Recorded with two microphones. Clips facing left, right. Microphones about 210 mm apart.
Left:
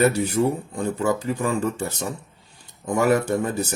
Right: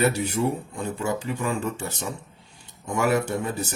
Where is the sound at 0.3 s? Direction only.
40° left (ahead or behind).